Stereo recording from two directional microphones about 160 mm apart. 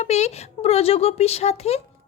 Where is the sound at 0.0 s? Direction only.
45° left (ahead or behind).